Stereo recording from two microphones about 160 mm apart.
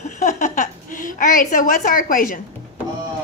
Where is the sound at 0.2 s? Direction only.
50° left (ahead or behind).